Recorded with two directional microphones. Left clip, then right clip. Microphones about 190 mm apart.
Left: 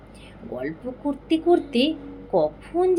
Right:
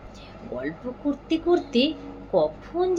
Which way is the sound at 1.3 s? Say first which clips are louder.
Left 3 dB; 30° left (ahead or behind).